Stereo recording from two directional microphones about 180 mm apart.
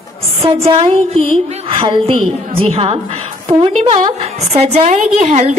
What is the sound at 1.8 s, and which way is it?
A woman's voice, 30° right (ahead or behind).